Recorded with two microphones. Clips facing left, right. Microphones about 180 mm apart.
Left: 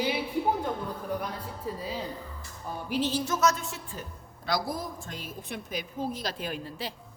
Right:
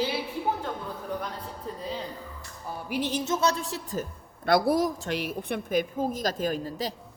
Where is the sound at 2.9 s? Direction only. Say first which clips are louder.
Right 1 dB; 15° right (ahead or behind); by 4.1 s 40° right (ahead or behind).